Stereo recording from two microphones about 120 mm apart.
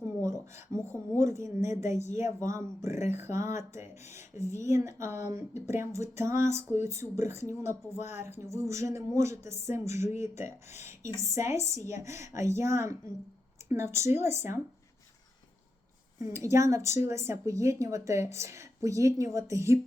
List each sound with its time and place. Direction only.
0.2 s speech: 25° right (ahead or behind)
16.1 s speech: 25° right (ahead or behind)